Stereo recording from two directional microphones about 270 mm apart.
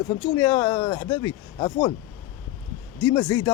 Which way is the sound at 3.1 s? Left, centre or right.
Centre.